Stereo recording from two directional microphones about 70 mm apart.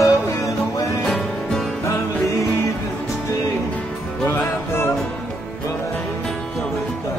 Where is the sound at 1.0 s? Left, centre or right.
Centre.